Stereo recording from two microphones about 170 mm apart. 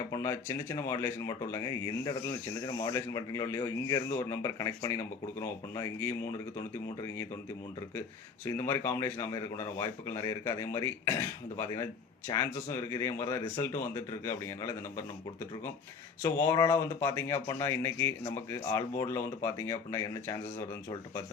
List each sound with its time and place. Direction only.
0.1 s speech: 20° left (ahead or behind)
8.4 s speech: 20° left (ahead or behind)
16.2 s speech: 15° left (ahead or behind)